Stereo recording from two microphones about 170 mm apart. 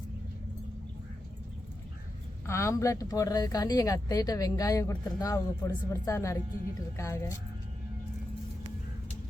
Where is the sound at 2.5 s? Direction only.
15° left (ahead or behind).